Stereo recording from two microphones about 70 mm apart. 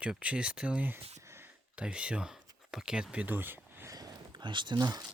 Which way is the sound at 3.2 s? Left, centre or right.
Right.